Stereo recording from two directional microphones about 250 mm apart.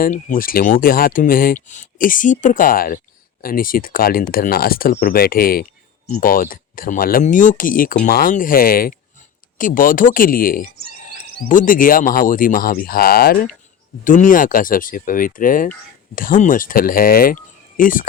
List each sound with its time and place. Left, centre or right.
0.0 s speech: left